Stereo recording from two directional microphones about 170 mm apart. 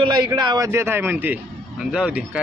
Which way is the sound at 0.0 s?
25° right (ahead or behind).